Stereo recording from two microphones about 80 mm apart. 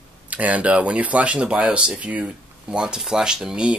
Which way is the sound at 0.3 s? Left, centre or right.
Centre.